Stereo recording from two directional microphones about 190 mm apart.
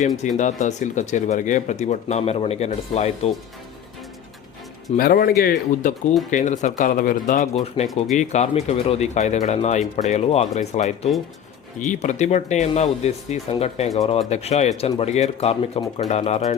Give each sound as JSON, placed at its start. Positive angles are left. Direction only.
{"t": 0.2, "sound": "speech", "side_deg": 40}
{"t": 4.9, "sound": "speech", "side_deg": 50}
{"t": 6.3, "sound": "speech", "side_deg": 40}
{"t": 7.8, "sound": "speech", "side_deg": 25}
{"t": 8.1, "sound": "speech", "side_deg": 40}